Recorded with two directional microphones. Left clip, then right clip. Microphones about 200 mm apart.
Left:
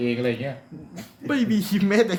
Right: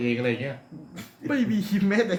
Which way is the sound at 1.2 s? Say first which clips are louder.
Left 2 dB; 50° left (ahead or behind).